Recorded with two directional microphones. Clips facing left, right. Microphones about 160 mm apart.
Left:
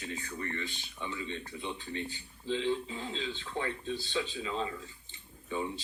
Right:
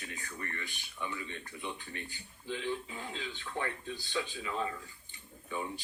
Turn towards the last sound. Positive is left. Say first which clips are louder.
# left 3 dB
turn(degrees=25)  # may be behind; listen again after turning